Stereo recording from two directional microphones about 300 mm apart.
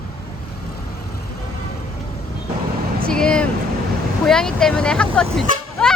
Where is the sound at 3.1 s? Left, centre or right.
Centre.